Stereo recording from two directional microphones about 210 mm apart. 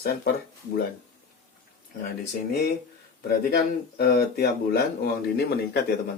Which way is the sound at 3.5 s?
50° left (ahead or behind).